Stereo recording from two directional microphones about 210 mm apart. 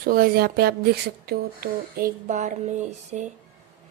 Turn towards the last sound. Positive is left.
turn(degrees=-35)  # may be behind; listen again after turning